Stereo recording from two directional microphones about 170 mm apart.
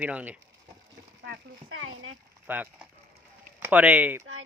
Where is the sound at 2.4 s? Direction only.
10° right (ahead or behind).